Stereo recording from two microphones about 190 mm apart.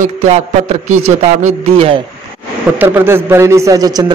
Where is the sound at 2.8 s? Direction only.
10° right (ahead or behind).